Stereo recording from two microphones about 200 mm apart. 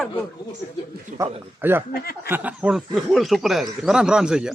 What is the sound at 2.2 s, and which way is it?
A man's voice, 10° right (ahead or behind).